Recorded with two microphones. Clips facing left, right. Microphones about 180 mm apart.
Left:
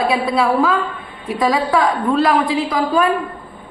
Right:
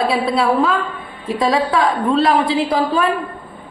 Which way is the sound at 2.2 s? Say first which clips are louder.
Even; 30° right (ahead or behind).